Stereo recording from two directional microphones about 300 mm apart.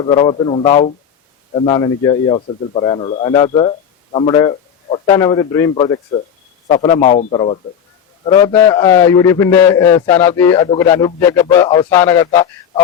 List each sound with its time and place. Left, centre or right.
0.0 s a man's voice: centre